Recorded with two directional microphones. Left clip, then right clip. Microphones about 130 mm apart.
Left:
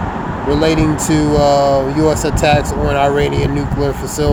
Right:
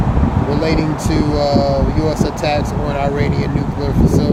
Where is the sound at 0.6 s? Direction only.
45° left (ahead or behind).